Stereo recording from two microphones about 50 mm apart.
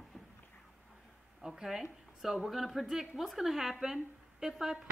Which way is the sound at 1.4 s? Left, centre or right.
Centre.